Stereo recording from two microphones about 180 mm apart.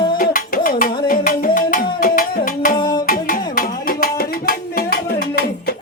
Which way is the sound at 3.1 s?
55° left (ahead or behind).